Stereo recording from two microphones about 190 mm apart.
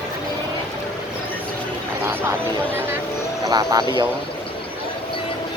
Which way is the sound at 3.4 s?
20° right (ahead or behind).